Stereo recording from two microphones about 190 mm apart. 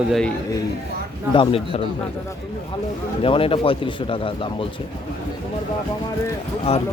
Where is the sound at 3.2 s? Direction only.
30° left (ahead or behind).